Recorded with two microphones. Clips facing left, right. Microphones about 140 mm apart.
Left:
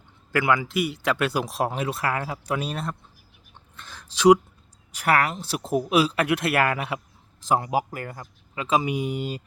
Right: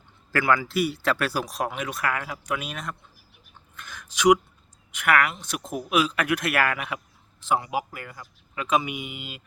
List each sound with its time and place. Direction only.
0.3 s speech: 20° left (ahead or behind); by 8.3 s 45° left (ahead or behind)
8.5 s speech: 30° left (ahead or behind)